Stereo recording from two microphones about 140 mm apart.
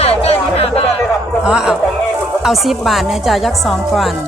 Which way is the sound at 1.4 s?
5° right (ahead or behind).